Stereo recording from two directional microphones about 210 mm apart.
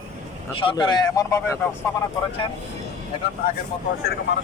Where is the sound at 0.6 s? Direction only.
20° left (ahead or behind).